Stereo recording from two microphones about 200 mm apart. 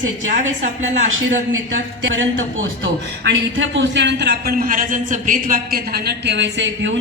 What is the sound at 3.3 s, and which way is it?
A man's voice, 65° right (ahead or behind).